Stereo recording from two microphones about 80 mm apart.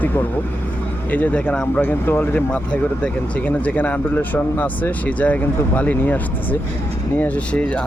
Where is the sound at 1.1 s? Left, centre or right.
Centre.